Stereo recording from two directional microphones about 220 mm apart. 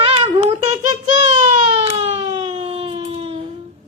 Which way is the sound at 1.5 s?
25° right (ahead or behind).